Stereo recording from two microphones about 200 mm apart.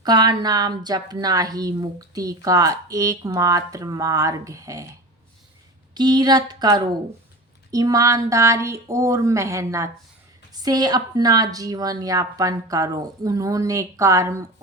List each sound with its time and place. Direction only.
0.0 s speech: 20° right (ahead or behind)